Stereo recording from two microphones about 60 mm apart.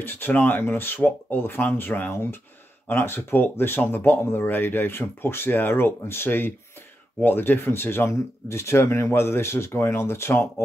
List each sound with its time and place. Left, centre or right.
0.0 s speech: left